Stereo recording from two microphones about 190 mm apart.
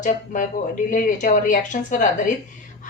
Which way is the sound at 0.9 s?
45° left (ahead or behind).